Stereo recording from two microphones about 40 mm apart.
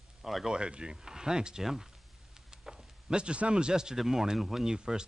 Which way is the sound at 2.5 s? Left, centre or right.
Right.